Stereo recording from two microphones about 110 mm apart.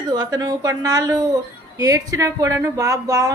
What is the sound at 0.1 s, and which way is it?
A man's voice, 35° right (ahead or behind).